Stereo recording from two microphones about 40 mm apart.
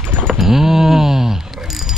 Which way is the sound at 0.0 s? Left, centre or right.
Right.